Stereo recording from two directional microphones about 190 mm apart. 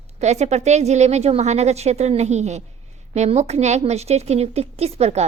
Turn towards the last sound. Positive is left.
turn(degrees=-35)  # may be behind; listen again after turning